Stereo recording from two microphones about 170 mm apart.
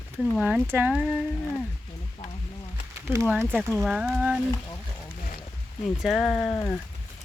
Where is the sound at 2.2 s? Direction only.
35° left (ahead or behind).